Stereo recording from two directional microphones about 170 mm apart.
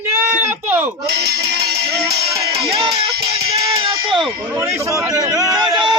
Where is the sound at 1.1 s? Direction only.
70° right (ahead or behind).